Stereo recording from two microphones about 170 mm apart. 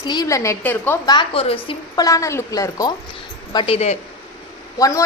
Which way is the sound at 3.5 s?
30° left (ahead or behind).